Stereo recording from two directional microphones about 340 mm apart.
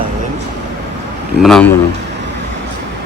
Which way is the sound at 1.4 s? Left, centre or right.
Centre.